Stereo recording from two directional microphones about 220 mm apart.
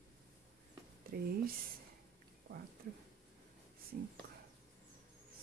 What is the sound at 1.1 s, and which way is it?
Speech, 40° right (ahead or behind).